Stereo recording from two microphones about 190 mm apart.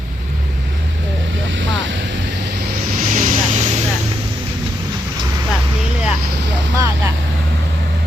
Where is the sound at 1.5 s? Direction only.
75° right (ahead or behind).